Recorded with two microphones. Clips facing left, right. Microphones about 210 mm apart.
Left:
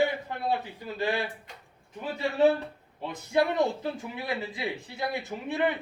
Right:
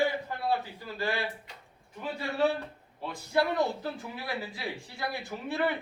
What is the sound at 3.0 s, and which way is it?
Speech, 20° left (ahead or behind).